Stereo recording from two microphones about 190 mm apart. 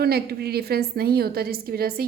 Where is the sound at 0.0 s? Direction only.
55° right (ahead or behind).